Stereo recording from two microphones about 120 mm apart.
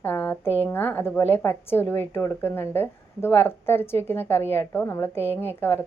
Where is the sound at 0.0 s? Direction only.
15° left (ahead or behind).